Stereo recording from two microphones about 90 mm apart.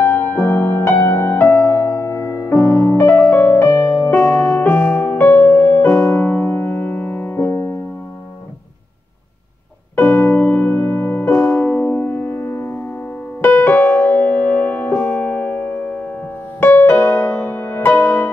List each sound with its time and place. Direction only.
0.0 s music: 20° left (ahead or behind); by 2.6 s 40° left (ahead or behind)
2.6 s piano: 30° left (ahead or behind)
4.0 s music: 25° left (ahead or behind)
9.9 s music: 20° left (ahead or behind)